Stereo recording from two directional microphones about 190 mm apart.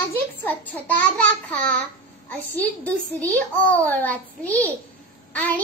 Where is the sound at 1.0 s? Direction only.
5° left (ahead or behind).